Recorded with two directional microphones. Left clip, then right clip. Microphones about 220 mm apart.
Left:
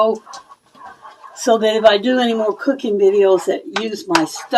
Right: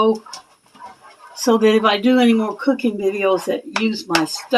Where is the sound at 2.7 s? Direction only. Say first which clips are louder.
Left 8 dB; 20° right (ahead or behind).